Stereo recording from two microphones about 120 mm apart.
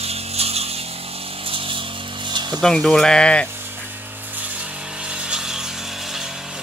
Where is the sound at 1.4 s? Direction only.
50° right (ahead or behind).